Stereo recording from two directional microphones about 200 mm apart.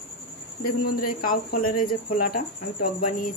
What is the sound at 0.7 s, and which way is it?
Speech, 45° left (ahead or behind).